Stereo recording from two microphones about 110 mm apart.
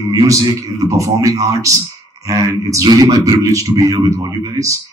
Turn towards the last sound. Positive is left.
turn(degrees=-30)  # may be behind; listen again after turning